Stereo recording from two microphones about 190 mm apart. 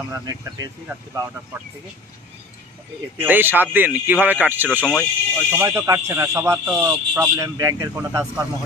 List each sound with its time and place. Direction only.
0.1 s speech: 15° right (ahead or behind)
3.2 s speech: 10° right (ahead or behind)
4.7 s speech: 10° left (ahead or behind)
5.4 s speech: 10° right (ahead or behind)